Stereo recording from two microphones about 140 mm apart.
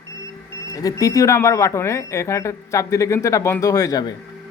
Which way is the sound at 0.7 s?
25° left (ahead or behind).